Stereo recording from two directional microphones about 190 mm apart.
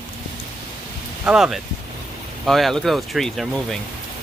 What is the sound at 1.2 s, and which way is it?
Speech, 5° right (ahead or behind).